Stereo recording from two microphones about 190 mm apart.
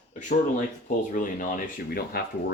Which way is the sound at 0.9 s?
45° left (ahead or behind).